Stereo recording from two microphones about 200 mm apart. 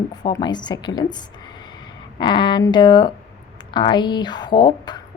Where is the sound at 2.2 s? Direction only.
25° left (ahead or behind).